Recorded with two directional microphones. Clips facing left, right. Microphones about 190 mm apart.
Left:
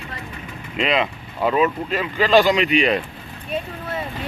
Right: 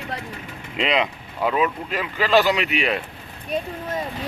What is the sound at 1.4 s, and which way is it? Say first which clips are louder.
Speech: left 3 dB; 5° right (ahead or behind).